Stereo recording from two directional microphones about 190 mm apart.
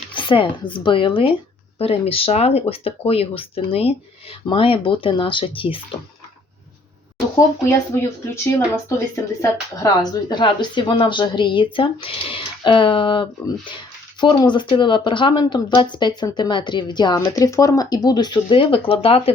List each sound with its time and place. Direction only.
0.1 s a woman's voice: 25° left (ahead or behind)
8.5 s a woman's voice: 15° left (ahead or behind)